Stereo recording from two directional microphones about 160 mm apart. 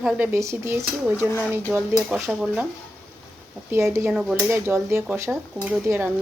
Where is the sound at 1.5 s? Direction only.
15° right (ahead or behind).